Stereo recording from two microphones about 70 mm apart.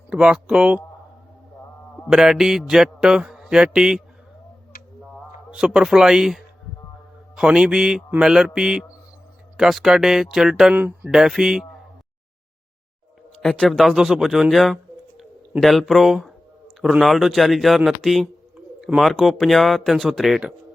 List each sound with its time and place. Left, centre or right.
0.1 s mantra: centre
2.0 s mantra: centre
5.5 s mantra: centre
9.6 s speech: centre
10.8 s speech: right
11.1 s mantra: centre
13.4 s speech: centre